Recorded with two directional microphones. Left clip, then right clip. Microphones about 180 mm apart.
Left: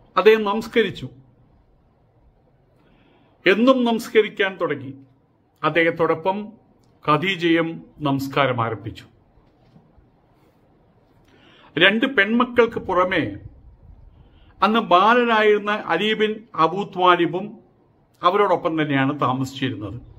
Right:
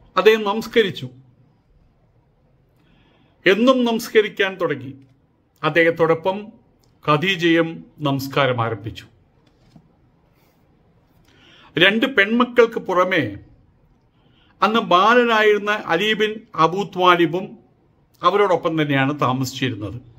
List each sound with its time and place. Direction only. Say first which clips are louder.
0.1 s a man's voice: even; 10° right (ahead or behind)
3.4 s a man's voice: right 1 dB; 5° right (ahead or behind)
11.3 s a man's voice: right 2 dB; 10° right (ahead or behind)
14.6 s a man's voice: right 1 dB; 10° right (ahead or behind)